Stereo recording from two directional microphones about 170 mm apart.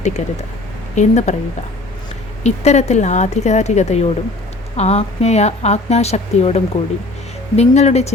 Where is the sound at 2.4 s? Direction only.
40° left (ahead or behind).